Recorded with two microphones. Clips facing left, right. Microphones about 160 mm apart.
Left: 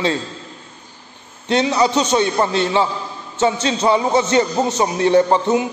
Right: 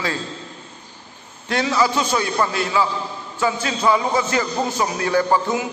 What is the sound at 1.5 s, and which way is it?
A man's voice, 20° left (ahead or behind).